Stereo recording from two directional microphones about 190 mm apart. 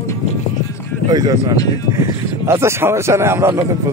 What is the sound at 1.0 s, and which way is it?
Speech, 20° right (ahead or behind).